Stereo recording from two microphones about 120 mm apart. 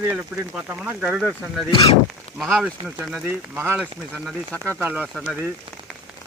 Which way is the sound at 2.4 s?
5° right (ahead or behind).